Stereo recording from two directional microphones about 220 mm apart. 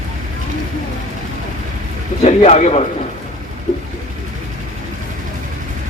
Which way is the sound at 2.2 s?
30° left (ahead or behind).